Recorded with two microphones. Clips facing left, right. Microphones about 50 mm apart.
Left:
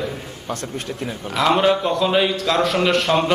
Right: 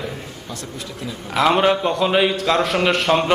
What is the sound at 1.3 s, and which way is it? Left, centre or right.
A man's voice, centre.